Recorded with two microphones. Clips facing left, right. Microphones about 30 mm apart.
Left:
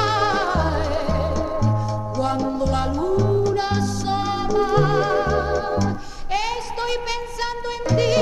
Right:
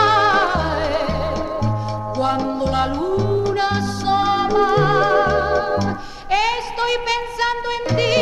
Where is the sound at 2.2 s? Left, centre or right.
Right.